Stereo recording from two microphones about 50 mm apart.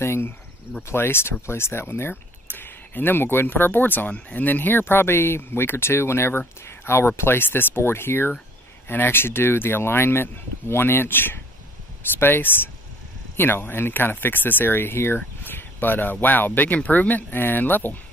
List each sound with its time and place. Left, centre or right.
0.0 s a sound: left
0.9 s speech: left
2.4 s speech: left